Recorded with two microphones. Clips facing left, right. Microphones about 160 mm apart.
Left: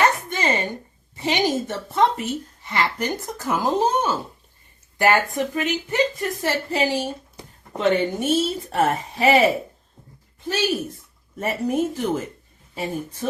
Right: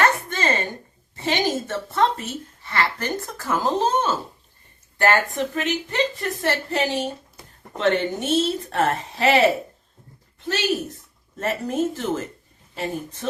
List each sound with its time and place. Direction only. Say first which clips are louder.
0.0 s a woman's voice: left 1 dB; 15° left (ahead or behind)